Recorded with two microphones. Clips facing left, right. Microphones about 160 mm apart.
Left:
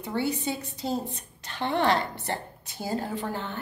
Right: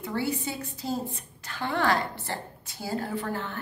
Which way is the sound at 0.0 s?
20° left (ahead or behind).